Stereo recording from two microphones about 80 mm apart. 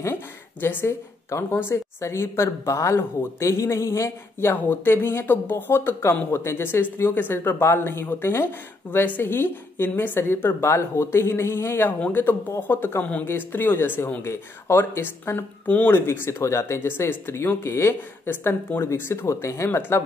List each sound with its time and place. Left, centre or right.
0.0 s speech: left